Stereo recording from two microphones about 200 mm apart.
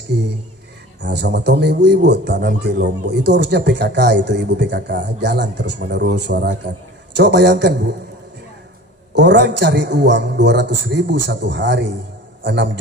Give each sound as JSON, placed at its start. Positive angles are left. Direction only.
{"t": 1.0, "sound": "a man's voice", "side_deg": -55}
{"t": 9.1, "sound": "a man's voice", "side_deg": -60}